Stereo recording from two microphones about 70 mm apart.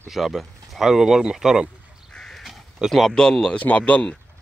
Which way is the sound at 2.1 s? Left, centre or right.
Centre.